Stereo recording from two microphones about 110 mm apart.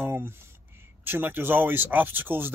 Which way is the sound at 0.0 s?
20° right (ahead or behind).